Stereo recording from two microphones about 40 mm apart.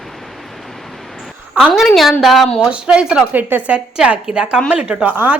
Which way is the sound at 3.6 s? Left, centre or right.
Right.